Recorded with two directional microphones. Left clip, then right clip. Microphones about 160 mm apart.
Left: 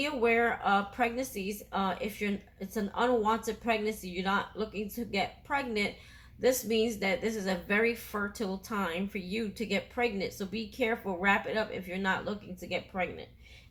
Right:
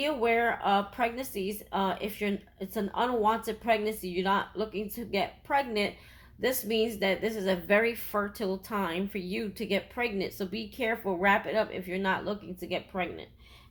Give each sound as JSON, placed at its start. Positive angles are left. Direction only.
{"t": 0.0, "sound": "a woman's voice", "side_deg": -30}